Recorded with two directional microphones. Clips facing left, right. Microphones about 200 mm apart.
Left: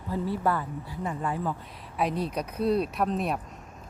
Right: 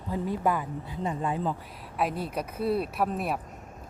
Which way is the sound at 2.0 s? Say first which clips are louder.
Left 1 dB; 5° right (ahead or behind).